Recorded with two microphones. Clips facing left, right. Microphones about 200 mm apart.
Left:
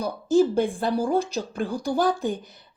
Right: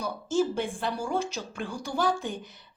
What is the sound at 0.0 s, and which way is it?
A woman's voice, 35° left (ahead or behind).